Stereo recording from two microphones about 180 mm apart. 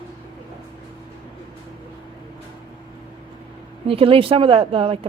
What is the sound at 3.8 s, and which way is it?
Speech, 30° right (ahead or behind).